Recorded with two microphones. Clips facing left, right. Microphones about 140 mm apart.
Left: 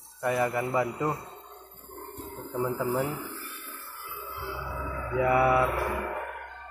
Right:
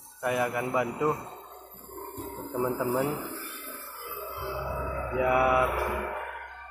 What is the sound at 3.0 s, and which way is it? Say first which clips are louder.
Speech: right 2 dB; 35° right (ahead or behind).